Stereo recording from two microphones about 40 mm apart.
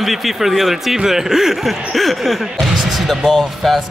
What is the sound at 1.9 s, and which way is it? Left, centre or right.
Speech, centre.